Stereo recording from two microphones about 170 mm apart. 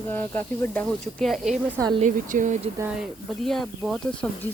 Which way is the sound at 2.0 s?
50° right (ahead or behind).